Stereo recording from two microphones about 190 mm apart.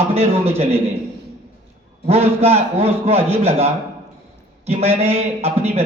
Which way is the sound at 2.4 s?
30° right (ahead or behind).